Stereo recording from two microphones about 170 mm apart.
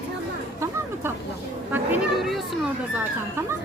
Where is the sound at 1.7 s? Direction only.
10° right (ahead or behind).